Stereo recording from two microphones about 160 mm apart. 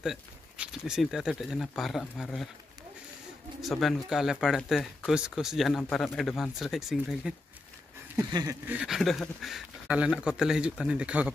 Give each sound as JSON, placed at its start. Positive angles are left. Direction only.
{"t": 0.0, "sound": "speech", "side_deg": -5}
{"t": 3.6, "sound": "speech", "side_deg": 0}
{"t": 8.3, "sound": "a sound", "side_deg": -25}
{"t": 8.6, "sound": "speech", "side_deg": -5}